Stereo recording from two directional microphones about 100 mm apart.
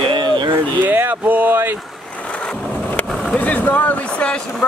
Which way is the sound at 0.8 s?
20° right (ahead or behind).